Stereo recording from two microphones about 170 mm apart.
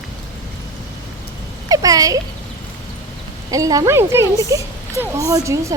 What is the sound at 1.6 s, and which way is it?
Speech, 20° right (ahead or behind).